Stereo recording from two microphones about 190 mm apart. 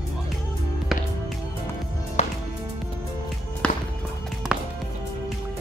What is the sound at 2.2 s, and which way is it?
Music, 35° left (ahead or behind).